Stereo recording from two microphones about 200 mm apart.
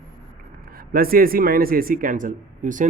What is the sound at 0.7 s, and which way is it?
Speech, 45° right (ahead or behind).